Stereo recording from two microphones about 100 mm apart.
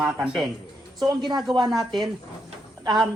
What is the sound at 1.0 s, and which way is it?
Speech, 45° right (ahead or behind).